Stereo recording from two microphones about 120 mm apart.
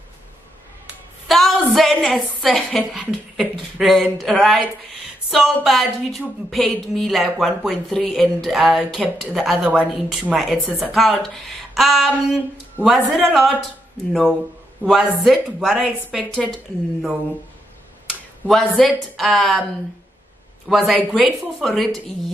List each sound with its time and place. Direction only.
1.2 s music: centre (ahead or behind)
1.7 s a woman's voice: centre (ahead or behind)
14.9 s a woman's voice: centre (ahead or behind)
18.5 s a woman's voice: centre (ahead or behind)
20.6 s a woman's voice: centre (ahead or behind)